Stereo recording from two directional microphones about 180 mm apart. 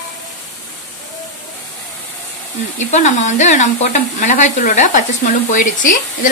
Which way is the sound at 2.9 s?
40° left (ahead or behind).